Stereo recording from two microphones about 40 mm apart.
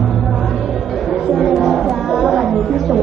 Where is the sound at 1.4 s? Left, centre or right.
Centre.